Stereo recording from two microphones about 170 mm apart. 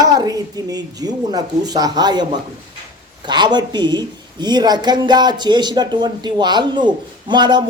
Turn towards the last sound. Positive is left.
turn(degrees=-25)  # may be behind; listen again after turning